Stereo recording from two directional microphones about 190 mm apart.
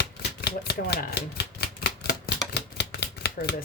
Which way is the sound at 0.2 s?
60° left (ahead or behind).